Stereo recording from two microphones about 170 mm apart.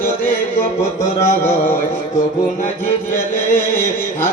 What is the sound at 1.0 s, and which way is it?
Chant, 15° left (ahead or behind).